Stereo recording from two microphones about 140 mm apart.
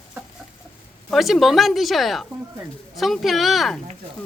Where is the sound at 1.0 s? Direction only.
Centre (ahead or behind).